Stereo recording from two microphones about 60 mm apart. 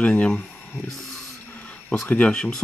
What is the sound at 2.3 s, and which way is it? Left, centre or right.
Speech, centre.